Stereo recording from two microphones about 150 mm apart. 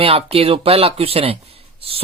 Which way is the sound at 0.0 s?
40° right (ahead or behind).